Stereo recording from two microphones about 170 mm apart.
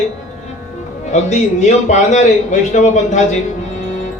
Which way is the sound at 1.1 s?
45° left (ahead or behind).